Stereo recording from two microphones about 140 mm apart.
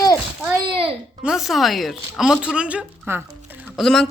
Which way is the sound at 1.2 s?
5° right (ahead or behind).